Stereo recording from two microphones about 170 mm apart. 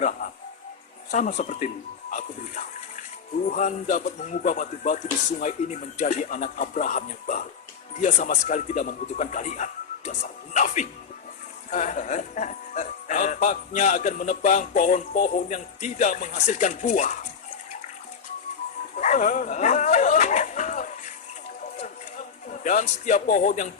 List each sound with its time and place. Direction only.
0.0 s music: 50° left (ahead or behind)
1.1 s speech: 45° left (ahead or behind)
18.9 s dog: 45° left (ahead or behind)
22.6 s speech: 45° left (ahead or behind)